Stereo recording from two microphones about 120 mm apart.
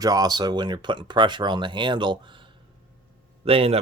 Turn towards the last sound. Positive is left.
turn(degrees=-55)  # may be behind; listen again after turning